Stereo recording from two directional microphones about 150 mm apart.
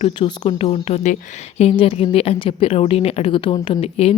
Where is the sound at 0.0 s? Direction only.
40° left (ahead or behind).